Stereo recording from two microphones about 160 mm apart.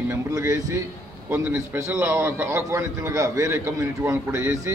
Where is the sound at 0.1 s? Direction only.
20° right (ahead or behind).